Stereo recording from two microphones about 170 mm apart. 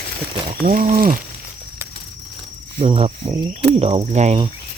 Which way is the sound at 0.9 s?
55° right (ahead or behind).